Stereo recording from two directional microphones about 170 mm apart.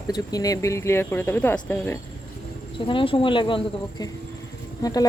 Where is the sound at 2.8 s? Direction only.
30° left (ahead or behind).